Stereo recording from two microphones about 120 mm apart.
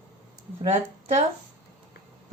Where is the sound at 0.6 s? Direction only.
60° right (ahead or behind).